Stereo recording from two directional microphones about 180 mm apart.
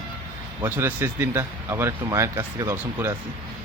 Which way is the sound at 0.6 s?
10° right (ahead or behind).